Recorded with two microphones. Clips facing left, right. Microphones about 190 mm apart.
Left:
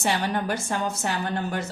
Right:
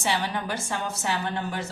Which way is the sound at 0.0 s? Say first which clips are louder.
Left 3 dB; 45° left (ahead or behind).